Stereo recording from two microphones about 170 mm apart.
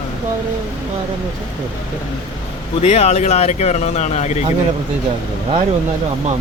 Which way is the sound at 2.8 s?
40° left (ahead or behind).